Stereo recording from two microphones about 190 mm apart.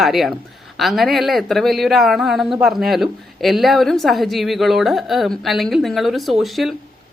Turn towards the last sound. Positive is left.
turn(degrees=0)  # may be behind; listen again after turning